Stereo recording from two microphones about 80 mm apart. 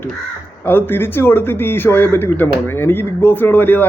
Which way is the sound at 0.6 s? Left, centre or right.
Left.